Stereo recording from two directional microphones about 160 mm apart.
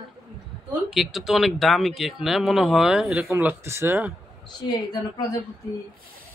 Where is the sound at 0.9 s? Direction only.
Centre (ahead or behind).